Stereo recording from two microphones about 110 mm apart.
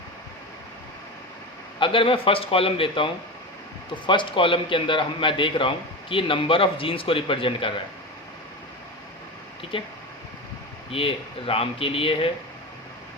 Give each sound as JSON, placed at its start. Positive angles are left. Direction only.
{"t": 1.8, "sound": "a man's voice", "side_deg": 50}
{"t": 9.7, "sound": "a man's voice", "side_deg": 55}
{"t": 10.9, "sound": "speech", "side_deg": 55}